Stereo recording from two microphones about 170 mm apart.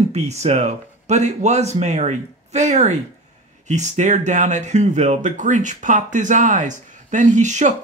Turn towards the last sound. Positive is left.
turn(degrees=-45)  # may be behind; listen again after turning